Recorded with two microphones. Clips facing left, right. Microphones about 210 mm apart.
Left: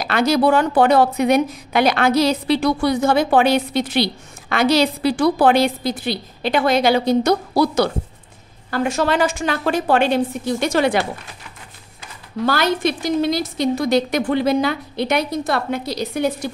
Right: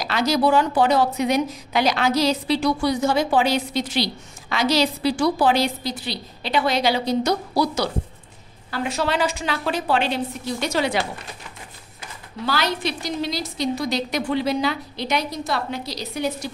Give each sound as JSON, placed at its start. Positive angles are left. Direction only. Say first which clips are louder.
{"t": 0.0, "sound": "a woman's voice", "louder": "left 4 dB", "side_deg": 55}
{"t": 12.4, "sound": "a woman's voice", "louder": "left 5 dB", "side_deg": 50}